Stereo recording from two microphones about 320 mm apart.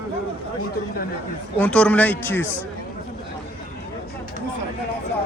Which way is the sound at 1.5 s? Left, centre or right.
Centre.